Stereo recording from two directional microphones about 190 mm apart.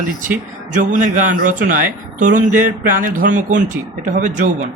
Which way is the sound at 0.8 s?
45° right (ahead or behind).